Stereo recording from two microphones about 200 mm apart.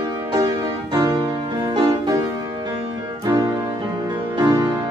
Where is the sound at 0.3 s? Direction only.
20° right (ahead or behind).